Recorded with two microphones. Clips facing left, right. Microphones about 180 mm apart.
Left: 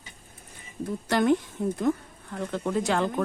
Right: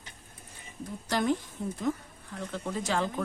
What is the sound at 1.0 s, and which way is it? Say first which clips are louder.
Speech: left 5 dB; 60° left (ahead or behind).